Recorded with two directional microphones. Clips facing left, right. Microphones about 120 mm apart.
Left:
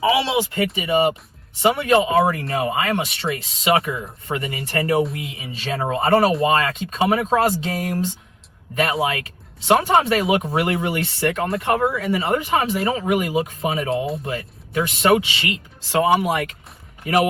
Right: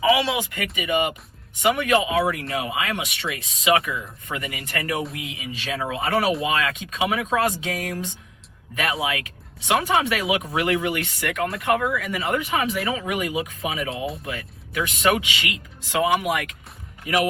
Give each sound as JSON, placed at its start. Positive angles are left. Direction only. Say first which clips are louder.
{"t": 0.0, "sound": "speech", "louder": "left 2 dB", "side_deg": 30}